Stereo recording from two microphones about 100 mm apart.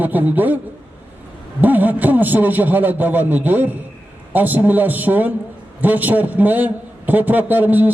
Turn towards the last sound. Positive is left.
turn(degrees=-15)  # may be behind; listen again after turning